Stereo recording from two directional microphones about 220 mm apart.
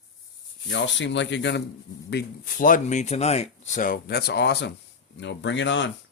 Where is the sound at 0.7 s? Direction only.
55° left (ahead or behind).